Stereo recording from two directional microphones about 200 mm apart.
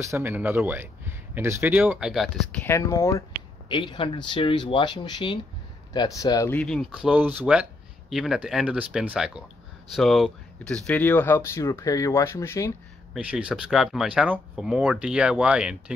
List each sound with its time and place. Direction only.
0.0 s speech: 10° right (ahead or behind)
2.7 s speech: 15° left (ahead or behind)
13.1 s speech: 5° right (ahead or behind)